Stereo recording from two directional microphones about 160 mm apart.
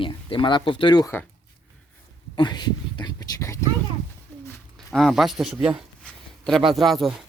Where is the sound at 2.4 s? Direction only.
25° left (ahead or behind).